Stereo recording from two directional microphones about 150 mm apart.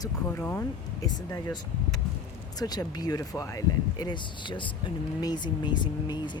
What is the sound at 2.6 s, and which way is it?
Speech, 25° left (ahead or behind).